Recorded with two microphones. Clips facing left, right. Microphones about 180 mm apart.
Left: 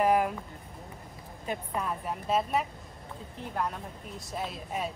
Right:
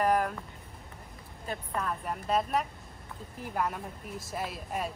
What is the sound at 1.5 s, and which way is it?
Speech, 10° left (ahead or behind).